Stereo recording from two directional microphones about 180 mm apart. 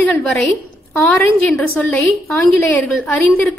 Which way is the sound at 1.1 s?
15° left (ahead or behind).